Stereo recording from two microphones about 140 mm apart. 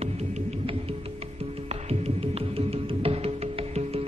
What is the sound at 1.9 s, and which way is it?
Music, 45° right (ahead or behind).